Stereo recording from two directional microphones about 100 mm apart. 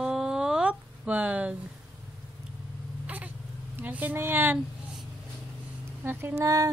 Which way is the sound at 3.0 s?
15° right (ahead or behind).